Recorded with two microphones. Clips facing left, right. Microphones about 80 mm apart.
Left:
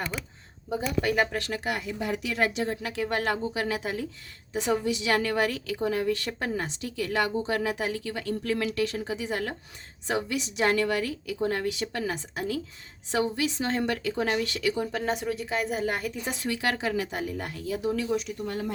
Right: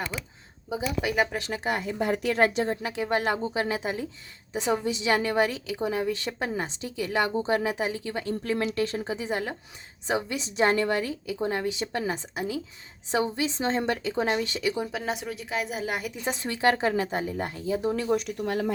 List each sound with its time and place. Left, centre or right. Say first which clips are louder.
0.7 s speech: left 1 dB; centre
1.4 s a woman's voice: right 1 dB; right
14.9 s a woman's voice: left 3 dB; centre
16.2 s speech: right 8 dB; right